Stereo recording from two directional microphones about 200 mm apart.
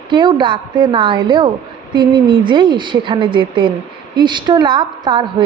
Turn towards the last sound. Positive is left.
turn(degrees=-20)  # may be behind; listen again after turning